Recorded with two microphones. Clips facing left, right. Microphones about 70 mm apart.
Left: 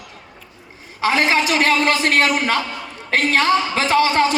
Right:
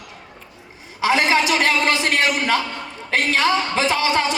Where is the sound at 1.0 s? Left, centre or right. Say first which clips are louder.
Even; left.